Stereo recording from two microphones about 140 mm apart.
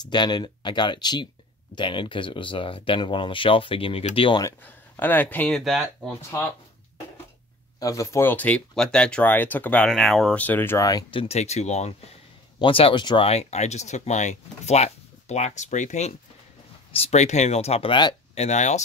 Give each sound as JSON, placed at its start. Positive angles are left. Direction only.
{"t": 0.0, "sound": "speech", "side_deg": 30}
{"t": 4.4, "sound": "speech", "side_deg": 15}
{"t": 5.5, "sound": "speech", "side_deg": 0}
{"t": 7.8, "sound": "speech", "side_deg": 25}
{"t": 9.8, "sound": "speech", "side_deg": 0}
{"t": 10.4, "sound": "speech", "side_deg": 15}
{"t": 11.3, "sound": "speech", "side_deg": 50}
{"t": 12.5, "sound": "speech", "side_deg": 40}
{"t": 18.3, "sound": "speech", "side_deg": 55}